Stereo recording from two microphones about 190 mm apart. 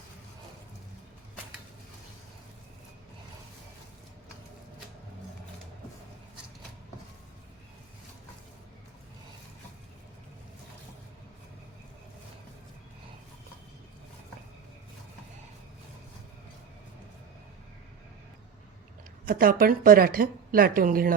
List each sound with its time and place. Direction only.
19.2 s a woman's voice: 50° right (ahead or behind)